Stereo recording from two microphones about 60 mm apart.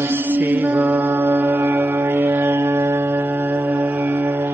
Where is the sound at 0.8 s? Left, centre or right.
Right.